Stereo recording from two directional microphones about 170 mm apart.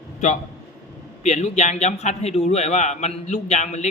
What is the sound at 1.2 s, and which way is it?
A man's voice, 40° left (ahead or behind).